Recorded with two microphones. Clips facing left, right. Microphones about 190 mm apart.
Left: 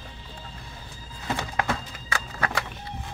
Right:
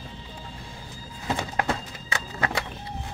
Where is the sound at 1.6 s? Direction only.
25° right (ahead or behind).